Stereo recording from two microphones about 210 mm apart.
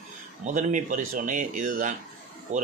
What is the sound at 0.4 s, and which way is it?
Speech, 35° right (ahead or behind).